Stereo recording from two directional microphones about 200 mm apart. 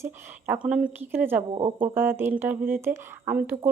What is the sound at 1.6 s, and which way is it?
Speech, 25° right (ahead or behind).